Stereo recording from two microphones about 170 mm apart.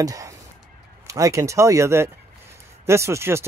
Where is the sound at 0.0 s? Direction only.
20° right (ahead or behind).